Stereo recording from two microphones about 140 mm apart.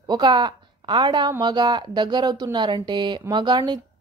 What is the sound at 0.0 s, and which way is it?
A woman's voice, 30° right (ahead or behind).